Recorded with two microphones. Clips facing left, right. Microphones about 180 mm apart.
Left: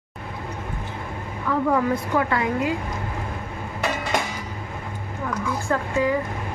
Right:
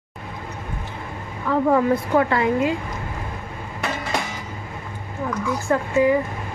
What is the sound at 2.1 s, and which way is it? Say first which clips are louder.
Speech: right 4 dB; 30° right (ahead or behind).